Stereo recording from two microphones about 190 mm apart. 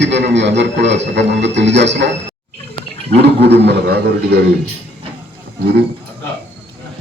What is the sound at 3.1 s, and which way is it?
A man's voice, 60° right (ahead or behind).